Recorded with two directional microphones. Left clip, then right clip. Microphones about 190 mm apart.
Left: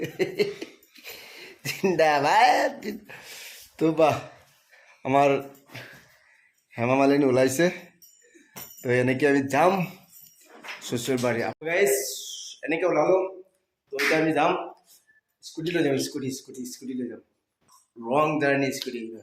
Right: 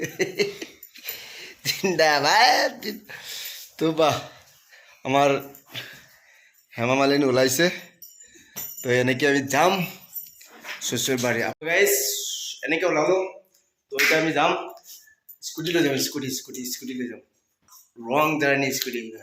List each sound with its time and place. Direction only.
0.0 s a sound: centre (ahead or behind)
6.7 s a man's voice: 5° left (ahead or behind)
14.1 s speech: centre (ahead or behind)
15.6 s speech: centre (ahead or behind)